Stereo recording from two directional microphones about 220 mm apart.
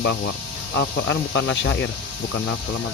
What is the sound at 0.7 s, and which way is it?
Speech, 55° left (ahead or behind).